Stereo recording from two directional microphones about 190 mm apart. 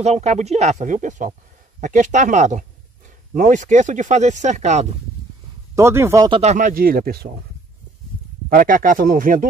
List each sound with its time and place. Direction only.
0.0 s speech: 35° right (ahead or behind)
5.8 s a man's voice: 15° right (ahead or behind)
6.4 s speech: 40° right (ahead or behind)
8.5 s speech: 50° right (ahead or behind)